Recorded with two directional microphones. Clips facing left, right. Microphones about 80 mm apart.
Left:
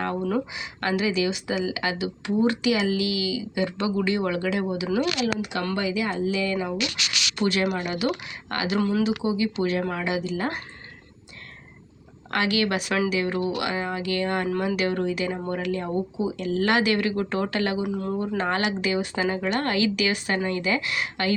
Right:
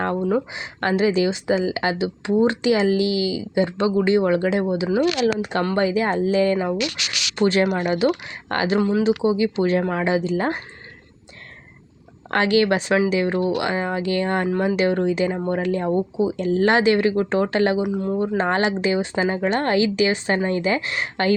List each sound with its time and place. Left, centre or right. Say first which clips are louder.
0.2 s speech: right 4 dB; right
12.3 s speech: right 6 dB; right
17.8 s speech: right 5 dB; centre; by 21.3 s right